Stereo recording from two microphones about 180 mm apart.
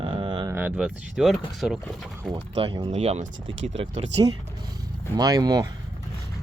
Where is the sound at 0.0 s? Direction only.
30° right (ahead or behind).